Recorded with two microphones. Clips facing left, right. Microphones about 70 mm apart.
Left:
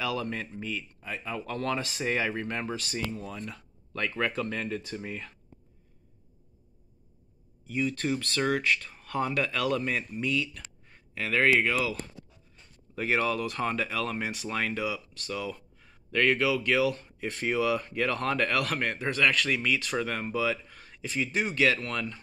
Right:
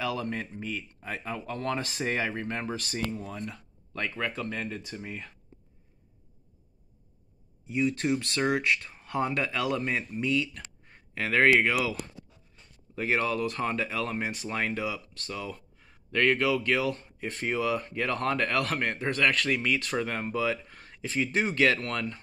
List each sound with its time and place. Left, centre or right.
0.0 s speech: right
1.0 s speech: right
1.5 s speech: right
1.8 s speech: right
2.7 s speech: right
7.7 s speech: centre; by 11.5 s right
12.9 s speech: right